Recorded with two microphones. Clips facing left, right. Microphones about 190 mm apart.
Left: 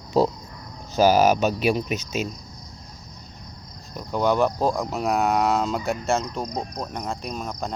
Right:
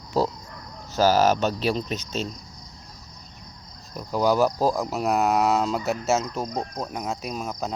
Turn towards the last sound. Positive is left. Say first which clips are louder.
# even
turn(degrees=-5)  # may be behind; listen again after turning